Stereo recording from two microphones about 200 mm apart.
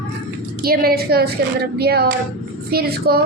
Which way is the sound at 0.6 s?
50° right (ahead or behind).